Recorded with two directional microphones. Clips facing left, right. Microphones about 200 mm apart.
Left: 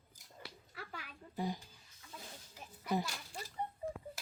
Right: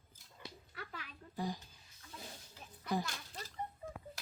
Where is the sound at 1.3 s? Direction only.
20° left (ahead or behind).